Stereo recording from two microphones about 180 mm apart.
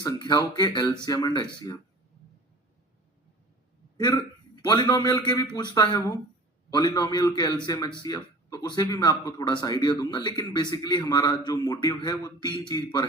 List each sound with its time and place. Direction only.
0.0 s speech: 20° left (ahead or behind)
3.9 s a man's voice: 25° left (ahead or behind)